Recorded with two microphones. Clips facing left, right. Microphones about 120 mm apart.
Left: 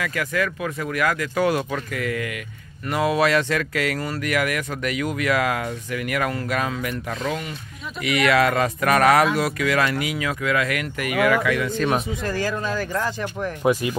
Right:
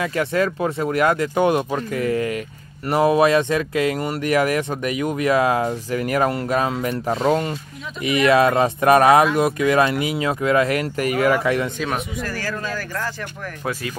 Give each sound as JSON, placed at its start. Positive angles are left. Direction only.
{"t": 0.0, "sound": "speech", "side_deg": -30}
{"t": 8.0, "sound": "speech", "side_deg": -25}
{"t": 12.3, "sound": "speech", "side_deg": 20}